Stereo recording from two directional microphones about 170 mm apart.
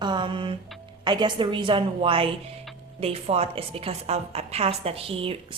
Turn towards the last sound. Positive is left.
turn(degrees=-35)  # may be behind; listen again after turning